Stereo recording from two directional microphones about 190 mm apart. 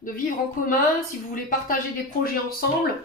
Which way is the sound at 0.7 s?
45° left (ahead or behind).